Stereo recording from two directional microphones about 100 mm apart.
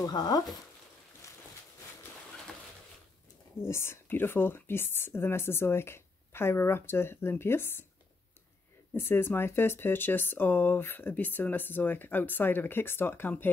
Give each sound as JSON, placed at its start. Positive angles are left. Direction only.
{"t": 0.0, "sound": "speech", "side_deg": 40}
{"t": 1.2, "sound": "a sound", "side_deg": 30}
{"t": 3.6, "sound": "speech", "side_deg": 25}
{"t": 8.9, "sound": "speech", "side_deg": 25}